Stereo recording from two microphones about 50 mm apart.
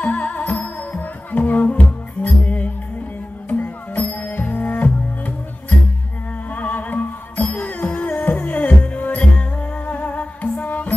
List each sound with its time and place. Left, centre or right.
0.0 s music: left
6.5 s music: left